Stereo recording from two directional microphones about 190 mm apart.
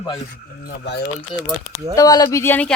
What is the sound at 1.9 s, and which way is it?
Speech, 20° left (ahead or behind).